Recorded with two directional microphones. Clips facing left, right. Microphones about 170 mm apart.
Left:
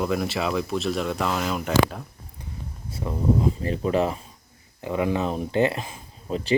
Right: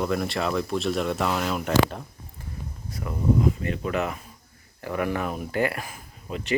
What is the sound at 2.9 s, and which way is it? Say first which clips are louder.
Speech: left 1 dB; 25° left (ahead or behind).